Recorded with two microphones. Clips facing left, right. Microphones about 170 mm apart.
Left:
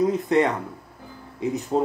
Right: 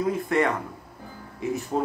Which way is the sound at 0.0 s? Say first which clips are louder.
Left 4 dB; 20° left (ahead or behind).